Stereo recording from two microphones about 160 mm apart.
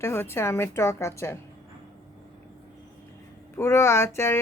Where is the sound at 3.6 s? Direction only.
15° left (ahead or behind).